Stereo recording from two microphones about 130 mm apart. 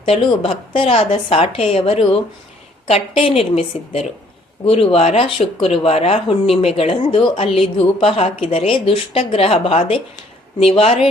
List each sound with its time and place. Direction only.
0.0 s speech: 45° left (ahead or behind)